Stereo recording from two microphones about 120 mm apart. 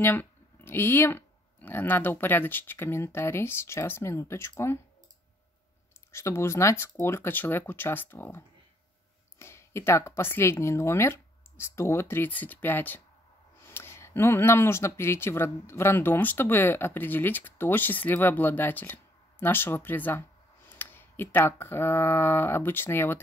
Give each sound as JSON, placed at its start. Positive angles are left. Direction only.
{"t": 0.0, "sound": "speech", "side_deg": 15}
{"t": 6.1, "sound": "speech", "side_deg": 25}